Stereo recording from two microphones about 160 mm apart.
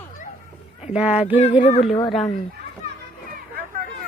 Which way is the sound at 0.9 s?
5° right (ahead or behind).